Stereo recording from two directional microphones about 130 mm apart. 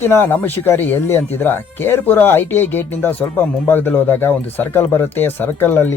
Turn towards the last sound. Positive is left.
turn(degrees=15)  # may be behind; listen again after turning